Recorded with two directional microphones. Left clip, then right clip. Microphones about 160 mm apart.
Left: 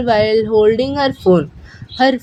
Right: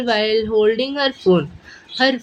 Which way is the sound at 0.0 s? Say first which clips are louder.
Left 4 dB; 50° left (ahead or behind).